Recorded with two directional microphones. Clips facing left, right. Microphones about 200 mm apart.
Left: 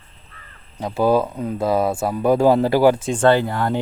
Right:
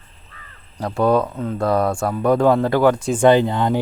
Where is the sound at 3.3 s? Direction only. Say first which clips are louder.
Right 2 dB; 20° right (ahead or behind).